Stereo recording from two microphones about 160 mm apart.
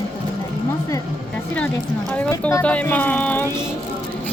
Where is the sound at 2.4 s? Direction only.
15° left (ahead or behind).